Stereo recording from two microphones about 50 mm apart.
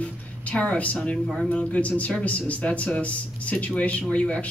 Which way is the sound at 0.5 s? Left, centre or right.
Left.